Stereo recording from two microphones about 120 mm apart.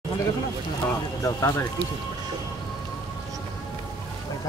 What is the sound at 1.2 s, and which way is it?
Speech, 30° left (ahead or behind).